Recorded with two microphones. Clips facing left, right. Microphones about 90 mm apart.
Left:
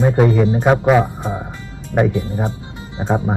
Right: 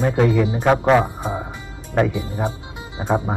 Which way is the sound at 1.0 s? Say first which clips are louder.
Left 2 dB; 10° right (ahead or behind).